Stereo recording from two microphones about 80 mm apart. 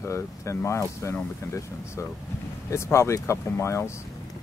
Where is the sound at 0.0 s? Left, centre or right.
Left.